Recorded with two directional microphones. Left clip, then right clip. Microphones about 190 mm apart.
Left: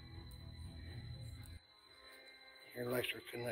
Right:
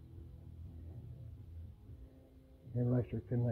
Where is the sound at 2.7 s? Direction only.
15° left (ahead or behind).